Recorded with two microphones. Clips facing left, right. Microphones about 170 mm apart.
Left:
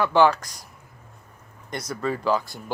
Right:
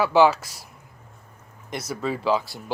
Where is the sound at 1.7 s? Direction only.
5° right (ahead or behind).